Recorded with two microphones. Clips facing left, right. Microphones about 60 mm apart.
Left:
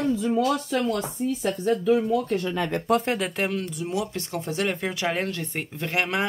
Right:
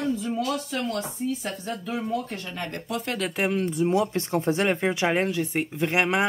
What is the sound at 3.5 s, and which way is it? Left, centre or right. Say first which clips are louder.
Speech: right 5 dB; right.